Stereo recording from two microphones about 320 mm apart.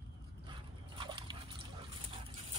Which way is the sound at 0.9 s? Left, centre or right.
Centre.